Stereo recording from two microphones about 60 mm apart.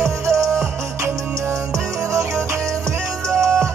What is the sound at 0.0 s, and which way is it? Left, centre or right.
Music, right.